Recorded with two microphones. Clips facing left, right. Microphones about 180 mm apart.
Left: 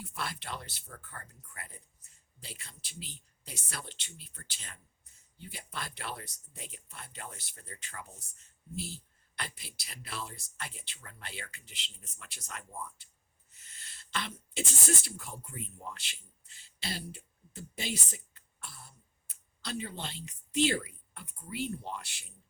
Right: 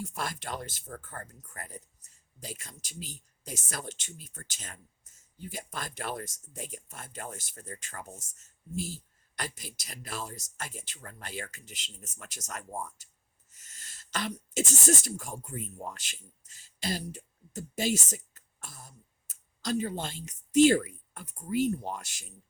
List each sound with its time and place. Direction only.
0.0 s speech: 45° right (ahead or behind)